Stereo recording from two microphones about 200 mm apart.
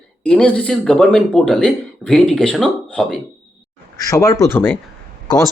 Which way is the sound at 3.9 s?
15° left (ahead or behind).